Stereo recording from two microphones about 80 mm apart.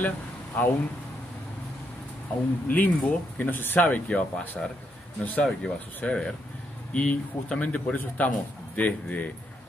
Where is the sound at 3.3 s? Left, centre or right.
Left.